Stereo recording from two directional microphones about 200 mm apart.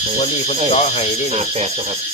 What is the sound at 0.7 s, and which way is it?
Speech, 30° left (ahead or behind).